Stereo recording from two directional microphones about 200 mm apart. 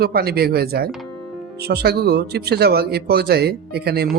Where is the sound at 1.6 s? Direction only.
55° right (ahead or behind).